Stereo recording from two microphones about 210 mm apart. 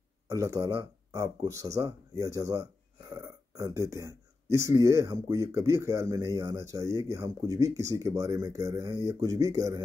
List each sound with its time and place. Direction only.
0.3 s speech: 15° right (ahead or behind)